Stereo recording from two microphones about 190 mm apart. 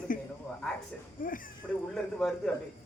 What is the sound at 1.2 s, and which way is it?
Speech, 45° left (ahead or behind).